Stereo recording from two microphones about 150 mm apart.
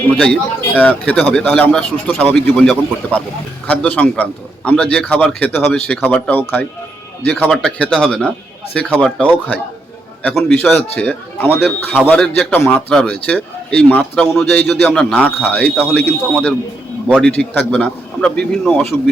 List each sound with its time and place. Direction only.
0.1 s a man's voice: 5° left (ahead or behind)